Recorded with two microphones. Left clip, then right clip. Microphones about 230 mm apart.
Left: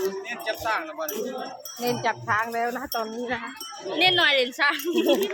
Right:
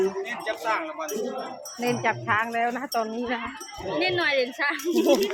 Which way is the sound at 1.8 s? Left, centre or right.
Right.